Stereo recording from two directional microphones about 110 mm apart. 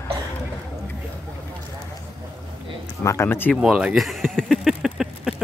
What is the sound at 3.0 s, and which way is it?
Speech, 25° left (ahead or behind).